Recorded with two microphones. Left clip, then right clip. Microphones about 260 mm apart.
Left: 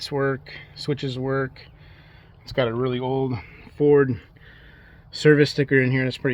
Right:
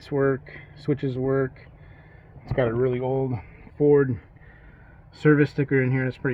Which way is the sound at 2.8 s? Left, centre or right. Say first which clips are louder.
Even; left.